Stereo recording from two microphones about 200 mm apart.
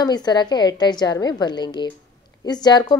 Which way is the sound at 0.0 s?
20° left (ahead or behind).